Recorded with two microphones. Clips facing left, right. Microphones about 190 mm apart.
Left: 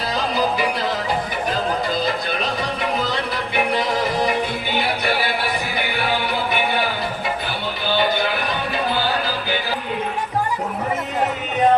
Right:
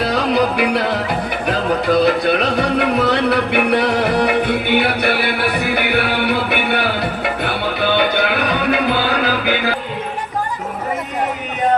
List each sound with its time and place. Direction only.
0.0 s music: 65° right (ahead or behind)